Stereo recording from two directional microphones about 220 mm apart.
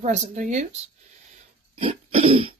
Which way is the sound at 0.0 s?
35° right (ahead or behind).